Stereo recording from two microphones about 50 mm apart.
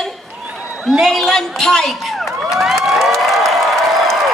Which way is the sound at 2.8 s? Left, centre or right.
Centre.